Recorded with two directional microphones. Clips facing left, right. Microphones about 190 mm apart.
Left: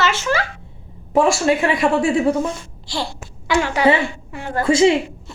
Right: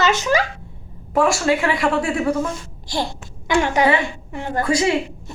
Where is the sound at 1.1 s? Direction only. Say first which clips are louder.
Left 2 dB; 25° left (ahead or behind).